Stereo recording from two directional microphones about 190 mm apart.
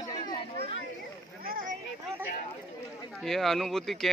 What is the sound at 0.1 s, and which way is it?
Chatter, 25° left (ahead or behind).